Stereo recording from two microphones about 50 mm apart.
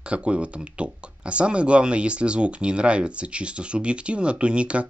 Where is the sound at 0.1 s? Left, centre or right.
Right.